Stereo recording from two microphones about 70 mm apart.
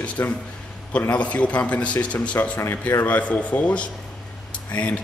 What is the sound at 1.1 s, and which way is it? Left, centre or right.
Speech, centre.